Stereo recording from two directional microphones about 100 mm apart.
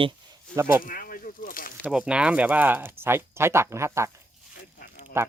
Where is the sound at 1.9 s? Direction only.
5° right (ahead or behind); by 4.1 s 30° right (ahead or behind).